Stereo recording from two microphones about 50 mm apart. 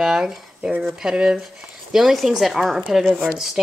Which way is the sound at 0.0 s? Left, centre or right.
Centre.